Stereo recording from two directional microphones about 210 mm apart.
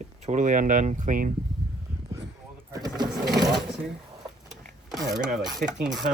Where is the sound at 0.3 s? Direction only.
35° right (ahead or behind).